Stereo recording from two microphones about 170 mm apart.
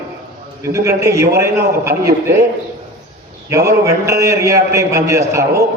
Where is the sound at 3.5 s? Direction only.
15° right (ahead or behind).